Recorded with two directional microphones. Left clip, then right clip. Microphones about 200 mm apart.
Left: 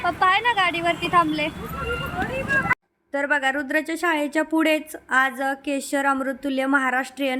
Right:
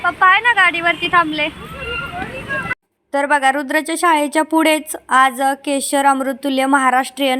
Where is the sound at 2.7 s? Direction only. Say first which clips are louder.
Right 3 dB; 15° right (ahead or behind).